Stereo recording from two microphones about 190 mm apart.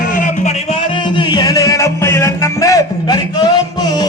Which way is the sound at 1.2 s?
20° left (ahead or behind).